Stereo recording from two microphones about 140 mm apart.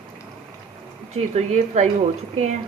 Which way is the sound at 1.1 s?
50° right (ahead or behind).